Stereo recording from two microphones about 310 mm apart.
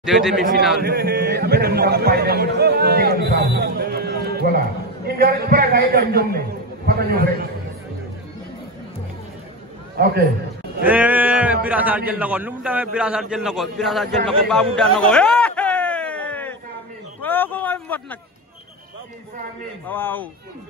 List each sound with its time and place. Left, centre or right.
0.0 s speech: centre
0.8 s a man's voice: right
10.0 s a man's voice: right
10.8 s speech: centre
15.0 s a sound: centre
19.9 s speech: centre